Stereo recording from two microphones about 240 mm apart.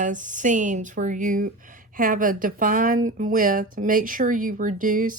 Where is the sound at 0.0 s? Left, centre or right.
Right.